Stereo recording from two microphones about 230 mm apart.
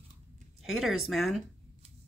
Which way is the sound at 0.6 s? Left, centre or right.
Centre.